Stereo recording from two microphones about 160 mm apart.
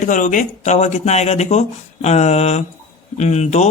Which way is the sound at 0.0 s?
55° left (ahead or behind).